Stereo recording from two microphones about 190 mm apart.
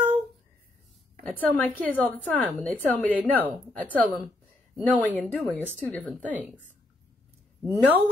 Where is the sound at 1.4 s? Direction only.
10° left (ahead or behind).